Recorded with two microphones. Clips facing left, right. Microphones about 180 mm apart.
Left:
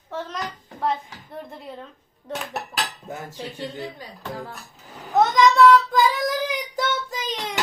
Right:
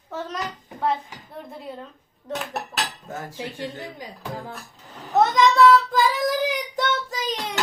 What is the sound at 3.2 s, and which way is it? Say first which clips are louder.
Speech: right 2 dB; 15° right (ahead or behind).